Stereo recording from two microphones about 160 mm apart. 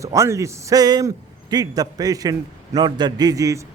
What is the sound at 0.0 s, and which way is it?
A man's voice, 20° right (ahead or behind).